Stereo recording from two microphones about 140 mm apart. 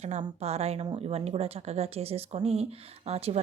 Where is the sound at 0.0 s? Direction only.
55° right (ahead or behind).